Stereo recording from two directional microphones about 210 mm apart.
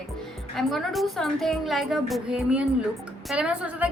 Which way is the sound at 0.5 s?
Centre (ahead or behind).